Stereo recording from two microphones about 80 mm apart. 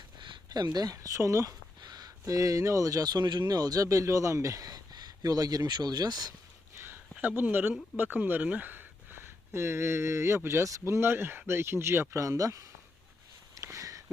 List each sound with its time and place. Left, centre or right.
0.2 s speech: right
1.8 s speech: right
7.2 s speech: right
13.6 s a sound: right